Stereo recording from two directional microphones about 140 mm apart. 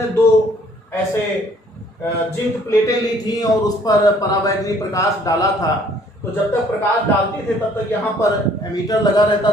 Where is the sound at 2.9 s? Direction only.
25° left (ahead or behind).